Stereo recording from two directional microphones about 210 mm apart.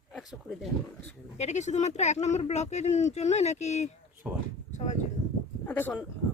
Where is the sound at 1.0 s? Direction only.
35° left (ahead or behind).